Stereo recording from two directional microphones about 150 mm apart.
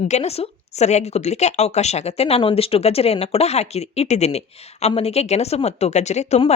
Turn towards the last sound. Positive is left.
turn(degrees=45)  # may be behind; listen again after turning